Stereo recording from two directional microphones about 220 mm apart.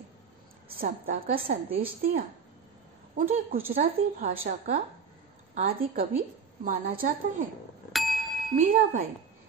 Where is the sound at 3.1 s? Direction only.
40° right (ahead or behind).